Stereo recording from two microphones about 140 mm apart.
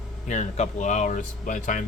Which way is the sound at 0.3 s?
55° left (ahead or behind).